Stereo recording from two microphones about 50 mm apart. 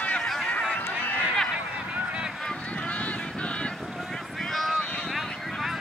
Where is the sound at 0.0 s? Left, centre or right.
Left.